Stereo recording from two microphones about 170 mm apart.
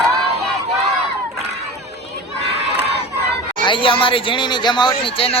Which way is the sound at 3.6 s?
30° left (ahead or behind).